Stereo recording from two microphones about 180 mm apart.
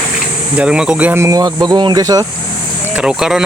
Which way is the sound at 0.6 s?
5° right (ahead or behind).